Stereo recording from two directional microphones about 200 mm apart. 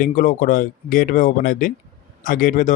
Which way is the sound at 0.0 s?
40° left (ahead or behind).